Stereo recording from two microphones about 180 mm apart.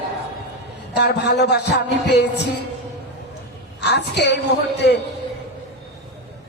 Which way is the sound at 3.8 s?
70° left (ahead or behind).